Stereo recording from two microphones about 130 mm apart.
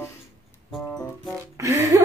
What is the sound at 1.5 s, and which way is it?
Music, 25° right (ahead or behind).